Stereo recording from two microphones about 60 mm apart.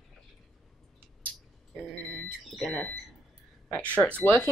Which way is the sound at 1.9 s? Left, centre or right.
Left.